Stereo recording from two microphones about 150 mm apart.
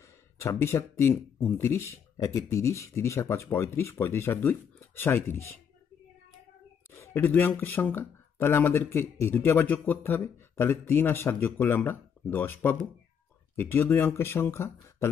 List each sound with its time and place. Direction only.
0.4 s speech: 20° left (ahead or behind)
6.9 s speech: 15° left (ahead or behind)